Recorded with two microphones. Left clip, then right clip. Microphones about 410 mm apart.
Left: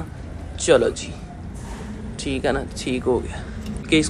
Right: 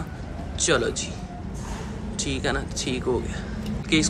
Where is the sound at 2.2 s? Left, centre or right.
Centre.